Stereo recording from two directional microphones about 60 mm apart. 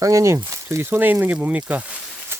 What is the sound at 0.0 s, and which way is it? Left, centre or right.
Speech, right.